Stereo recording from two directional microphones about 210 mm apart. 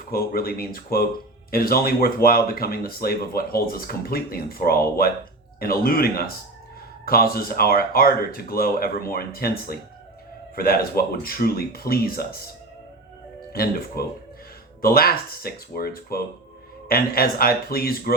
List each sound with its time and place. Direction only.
0.1 s speech: 45° left (ahead or behind)
13.5 s speech: 45° left (ahead or behind)